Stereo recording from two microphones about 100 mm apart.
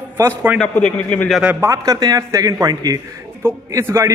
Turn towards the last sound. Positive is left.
turn(degrees=-30)  # may be behind; listen again after turning